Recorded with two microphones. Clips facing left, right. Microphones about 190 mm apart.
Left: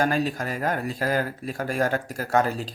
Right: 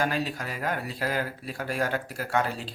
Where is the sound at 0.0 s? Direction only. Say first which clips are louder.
Left 5 dB; 45° left (ahead or behind).